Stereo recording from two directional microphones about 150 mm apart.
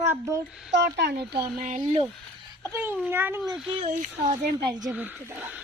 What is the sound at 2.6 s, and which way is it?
Speech, 15° right (ahead or behind).